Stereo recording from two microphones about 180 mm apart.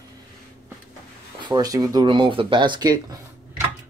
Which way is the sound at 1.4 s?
20° right (ahead or behind).